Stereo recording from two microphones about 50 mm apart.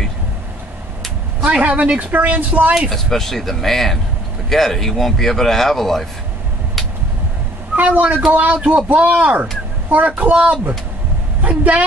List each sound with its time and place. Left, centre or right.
1.4 s speech: right
1.7 s a woman's voice: right
2.0 s a man's voice: right
2.9 s a man's voice: centre
7.7 s a sound: right
8.3 s a man's voice: right